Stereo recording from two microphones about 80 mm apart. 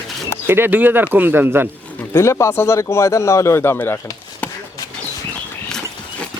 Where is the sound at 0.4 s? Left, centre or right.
Right.